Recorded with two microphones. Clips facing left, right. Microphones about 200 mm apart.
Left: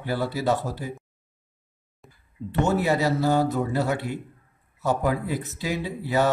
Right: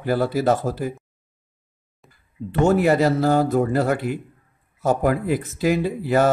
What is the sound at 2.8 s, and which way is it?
Speech, 50° right (ahead or behind).